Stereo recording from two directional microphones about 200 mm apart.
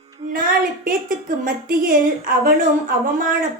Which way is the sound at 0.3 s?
45° right (ahead or behind).